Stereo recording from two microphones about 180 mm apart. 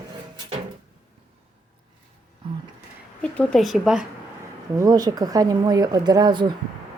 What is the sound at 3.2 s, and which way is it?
Speech, 5° left (ahead or behind).